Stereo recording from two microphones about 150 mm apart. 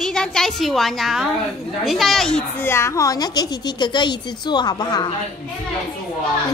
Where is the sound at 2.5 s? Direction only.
15° left (ahead or behind).